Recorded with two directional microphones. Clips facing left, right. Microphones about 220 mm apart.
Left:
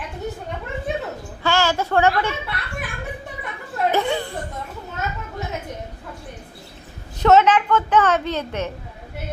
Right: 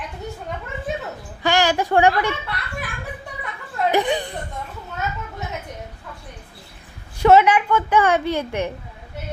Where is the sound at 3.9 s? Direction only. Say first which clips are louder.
Right 1 dB; 15° right (ahead or behind).